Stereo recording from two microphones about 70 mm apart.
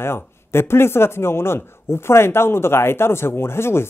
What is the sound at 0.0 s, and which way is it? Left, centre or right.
Speech, left.